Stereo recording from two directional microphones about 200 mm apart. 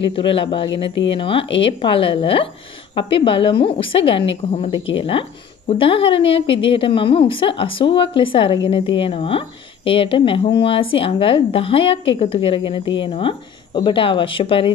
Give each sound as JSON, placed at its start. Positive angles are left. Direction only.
{"t": 0.0, "sound": "speech", "side_deg": 25}